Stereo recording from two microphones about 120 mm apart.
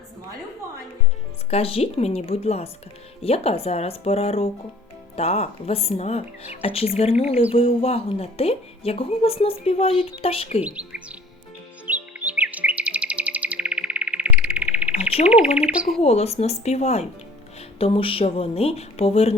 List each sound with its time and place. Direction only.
1.5 s a woman's voice: 55° left (ahead or behind)
10.6 s speech: 10° right (ahead or behind)
11.9 s music: 10° right (ahead or behind)
15.5 s speech: 10° right (ahead or behind)
16.0 s speech: 60° left (ahead or behind)
17.7 s speech: 50° left (ahead or behind)